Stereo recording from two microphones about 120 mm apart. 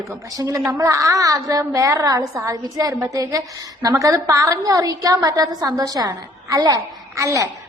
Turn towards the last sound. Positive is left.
turn(degrees=-25)  # may be behind; listen again after turning